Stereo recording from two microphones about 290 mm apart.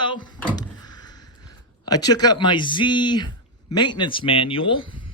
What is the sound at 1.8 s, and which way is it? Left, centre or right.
Speech, centre.